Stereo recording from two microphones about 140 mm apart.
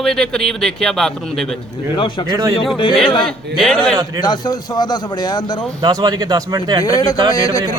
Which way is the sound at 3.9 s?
25° right (ahead or behind).